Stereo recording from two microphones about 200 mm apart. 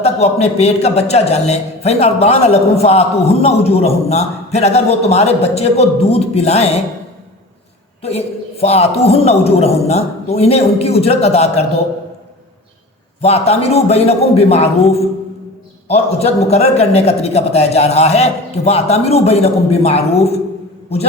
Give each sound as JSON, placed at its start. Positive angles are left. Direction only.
{"t": 0.0, "sound": "a man's voice", "side_deg": 30}
{"t": 8.0, "sound": "a man's voice", "side_deg": 30}
{"t": 13.2, "sound": "a man's voice", "side_deg": 30}